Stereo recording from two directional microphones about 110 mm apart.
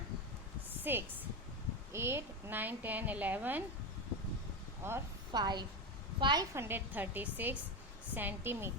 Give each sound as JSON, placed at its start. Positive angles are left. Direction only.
{"t": 0.8, "sound": "a woman's voice", "side_deg": -20}
{"t": 4.8, "sound": "speech", "side_deg": -20}
{"t": 5.3, "sound": "a woman's voice", "side_deg": -40}
{"t": 6.5, "sound": "a woman's voice", "side_deg": -20}